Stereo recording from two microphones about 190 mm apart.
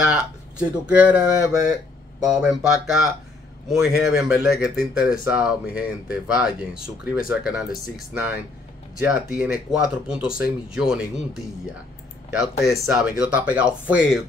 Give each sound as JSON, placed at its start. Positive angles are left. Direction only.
{"t": 0.1, "sound": "speech", "side_deg": -5}
{"t": 1.6, "sound": "a sound", "side_deg": -20}
{"t": 2.2, "sound": "speech", "side_deg": -5}